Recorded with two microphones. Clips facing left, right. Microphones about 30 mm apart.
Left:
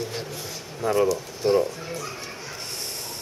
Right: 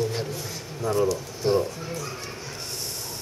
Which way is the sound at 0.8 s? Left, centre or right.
Left.